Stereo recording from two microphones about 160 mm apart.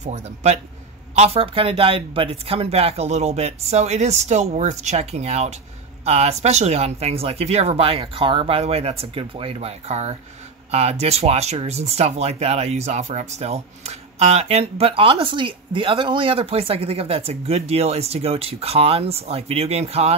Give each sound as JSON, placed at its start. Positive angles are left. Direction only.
{"t": 0.0, "sound": "speech", "side_deg": -45}